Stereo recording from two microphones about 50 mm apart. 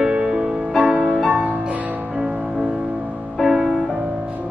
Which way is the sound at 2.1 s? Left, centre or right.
Centre.